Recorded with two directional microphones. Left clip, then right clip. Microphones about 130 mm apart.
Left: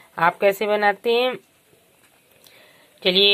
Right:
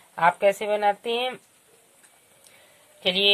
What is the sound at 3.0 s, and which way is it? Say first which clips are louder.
Speech: left 5 dB; 25° left (ahead or behind).